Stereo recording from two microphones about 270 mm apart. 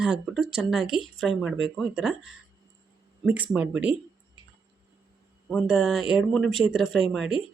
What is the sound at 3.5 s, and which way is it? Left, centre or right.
Speech, centre.